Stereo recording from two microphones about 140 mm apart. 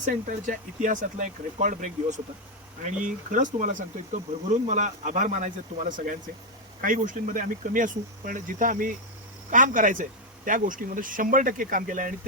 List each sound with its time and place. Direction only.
0.0 s speech: 70° right (ahead or behind)
3.3 s speech: 65° right (ahead or behind)